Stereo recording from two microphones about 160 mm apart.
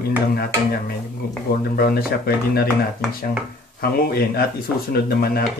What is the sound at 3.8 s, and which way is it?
Speech, 70° left (ahead or behind).